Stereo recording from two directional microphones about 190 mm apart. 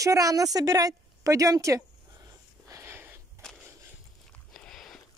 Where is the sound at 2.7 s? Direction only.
15° right (ahead or behind).